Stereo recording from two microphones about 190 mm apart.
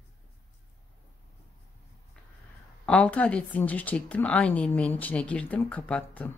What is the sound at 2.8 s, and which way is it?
Speech, 5° left (ahead or behind).